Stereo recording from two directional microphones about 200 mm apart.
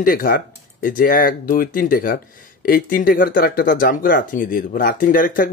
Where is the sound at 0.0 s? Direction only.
45° left (ahead or behind).